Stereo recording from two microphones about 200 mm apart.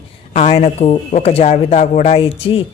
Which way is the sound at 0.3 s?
30° left (ahead or behind).